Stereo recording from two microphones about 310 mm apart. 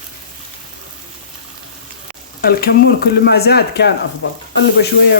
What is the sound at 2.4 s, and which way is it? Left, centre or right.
Speech, left.